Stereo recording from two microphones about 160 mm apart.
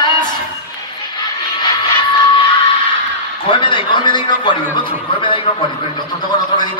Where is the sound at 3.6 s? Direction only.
30° left (ahead or behind).